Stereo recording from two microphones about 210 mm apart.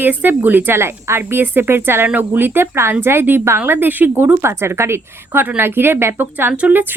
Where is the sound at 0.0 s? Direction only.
10° right (ahead or behind).